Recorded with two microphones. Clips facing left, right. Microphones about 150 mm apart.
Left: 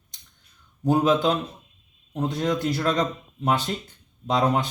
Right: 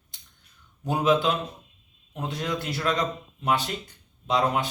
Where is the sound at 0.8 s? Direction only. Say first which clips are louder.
Left 3 dB; 40° left (ahead or behind).